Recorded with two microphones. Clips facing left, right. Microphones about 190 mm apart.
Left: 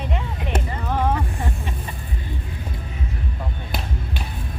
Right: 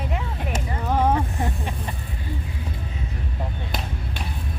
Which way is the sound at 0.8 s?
15° right (ahead or behind).